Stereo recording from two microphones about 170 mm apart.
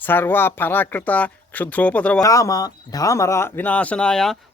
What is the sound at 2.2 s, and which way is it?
Speech, 20° left (ahead or behind).